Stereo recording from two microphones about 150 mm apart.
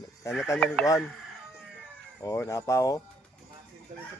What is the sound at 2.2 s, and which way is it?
Speech, 20° left (ahead or behind).